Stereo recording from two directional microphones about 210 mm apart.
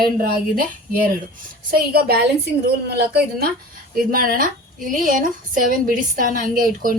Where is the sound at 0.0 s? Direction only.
45° right (ahead or behind).